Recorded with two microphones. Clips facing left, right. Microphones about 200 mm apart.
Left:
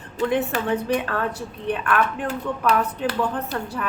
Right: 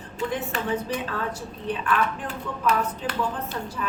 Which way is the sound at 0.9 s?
65° left (ahead or behind).